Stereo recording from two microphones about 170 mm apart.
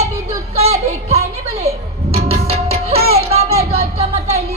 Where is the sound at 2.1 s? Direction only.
35° right (ahead or behind).